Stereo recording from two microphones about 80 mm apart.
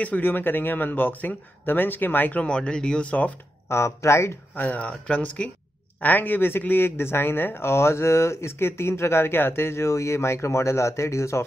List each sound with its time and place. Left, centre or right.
0.0 s speech: left
3.6 s speech: left
4.6 s speech: centre; by 11.4 s left